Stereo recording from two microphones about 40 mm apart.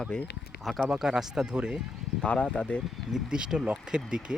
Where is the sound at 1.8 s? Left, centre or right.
Centre.